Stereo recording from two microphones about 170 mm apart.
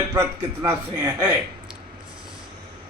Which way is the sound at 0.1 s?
15° right (ahead or behind).